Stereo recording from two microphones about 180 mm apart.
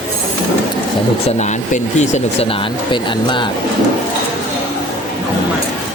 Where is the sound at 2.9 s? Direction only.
25° left (ahead or behind).